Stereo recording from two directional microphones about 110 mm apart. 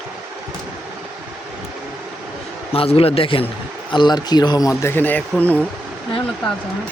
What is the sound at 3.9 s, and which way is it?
Speech, 45° left (ahead or behind).